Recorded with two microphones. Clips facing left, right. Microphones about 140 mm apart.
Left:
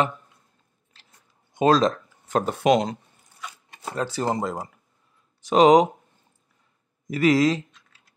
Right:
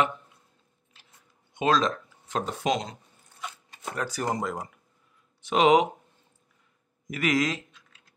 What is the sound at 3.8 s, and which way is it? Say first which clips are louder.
Speech: left 4 dB; 25° left (ahead or behind).